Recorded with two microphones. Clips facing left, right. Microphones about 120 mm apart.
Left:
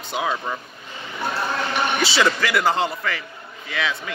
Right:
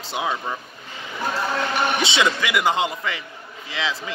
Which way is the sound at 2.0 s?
20° right (ahead or behind).